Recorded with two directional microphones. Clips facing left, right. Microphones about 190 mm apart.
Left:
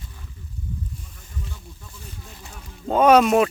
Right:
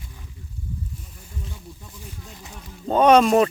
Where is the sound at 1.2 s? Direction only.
15° right (ahead or behind).